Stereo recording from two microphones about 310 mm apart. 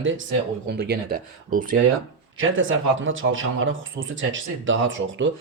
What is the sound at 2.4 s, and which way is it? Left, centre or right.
Speech, right.